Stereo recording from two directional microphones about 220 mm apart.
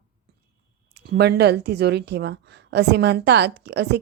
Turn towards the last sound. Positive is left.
turn(degrees=-50)  # may be behind; listen again after turning